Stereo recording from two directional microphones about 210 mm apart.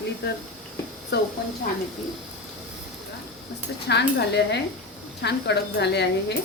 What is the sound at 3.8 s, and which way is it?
Speech, 55° left (ahead or behind).